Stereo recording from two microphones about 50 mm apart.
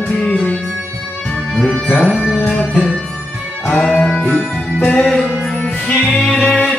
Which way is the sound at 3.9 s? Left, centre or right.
Centre.